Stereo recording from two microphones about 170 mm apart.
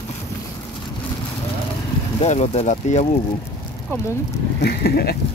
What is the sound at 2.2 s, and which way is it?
Speech, 40° left (ahead or behind).